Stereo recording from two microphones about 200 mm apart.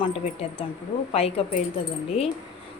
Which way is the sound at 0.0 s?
30° left (ahead or behind).